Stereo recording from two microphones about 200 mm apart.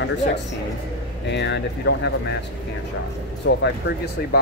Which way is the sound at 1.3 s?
60° left (ahead or behind).